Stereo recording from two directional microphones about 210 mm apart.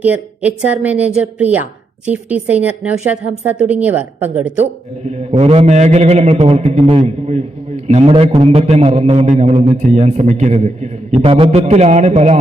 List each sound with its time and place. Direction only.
0.0 s a woman's voice: 10° right (ahead or behind)
5.0 s a man's voice: 30° right (ahead or behind)